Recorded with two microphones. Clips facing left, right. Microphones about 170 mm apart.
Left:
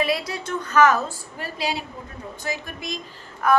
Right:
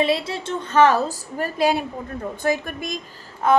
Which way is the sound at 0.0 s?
25° right (ahead or behind).